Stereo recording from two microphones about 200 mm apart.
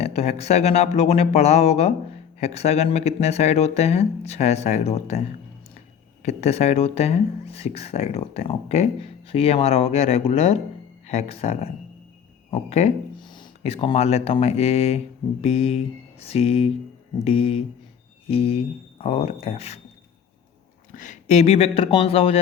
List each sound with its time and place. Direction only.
0.0 s speech: 30° left (ahead or behind)
20.9 s speech: 40° left (ahead or behind)